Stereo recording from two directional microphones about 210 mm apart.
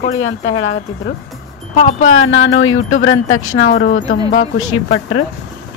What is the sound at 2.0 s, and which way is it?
Speech, 75° left (ahead or behind).